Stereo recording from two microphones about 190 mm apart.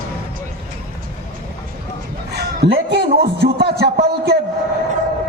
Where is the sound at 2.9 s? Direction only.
60° right (ahead or behind).